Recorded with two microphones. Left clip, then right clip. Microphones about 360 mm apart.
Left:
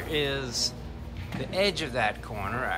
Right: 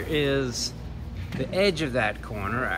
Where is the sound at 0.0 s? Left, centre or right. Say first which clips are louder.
Right 4 dB; centre.